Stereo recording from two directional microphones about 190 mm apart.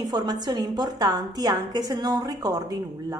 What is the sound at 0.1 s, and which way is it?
A woman's voice, 20° right (ahead or behind).